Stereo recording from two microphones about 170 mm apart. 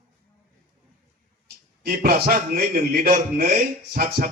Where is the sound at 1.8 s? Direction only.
60° right (ahead or behind).